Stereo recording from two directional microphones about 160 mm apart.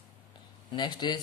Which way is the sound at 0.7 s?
30° left (ahead or behind).